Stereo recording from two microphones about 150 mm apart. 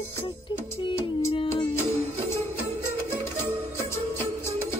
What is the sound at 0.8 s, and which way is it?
Music, 35° left (ahead or behind).